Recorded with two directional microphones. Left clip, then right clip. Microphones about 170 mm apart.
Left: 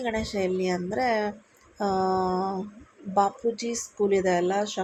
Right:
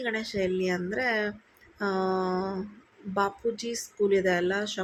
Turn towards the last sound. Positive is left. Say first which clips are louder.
# left 2 dB
turn(degrees=15)  # may be behind; listen again after turning